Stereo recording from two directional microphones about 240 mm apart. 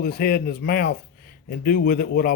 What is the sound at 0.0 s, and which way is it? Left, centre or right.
Speech, left.